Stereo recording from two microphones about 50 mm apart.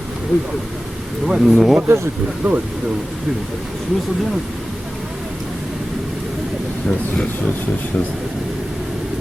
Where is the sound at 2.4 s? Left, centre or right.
Right.